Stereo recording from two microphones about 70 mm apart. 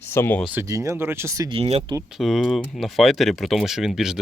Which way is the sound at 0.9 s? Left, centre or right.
Right.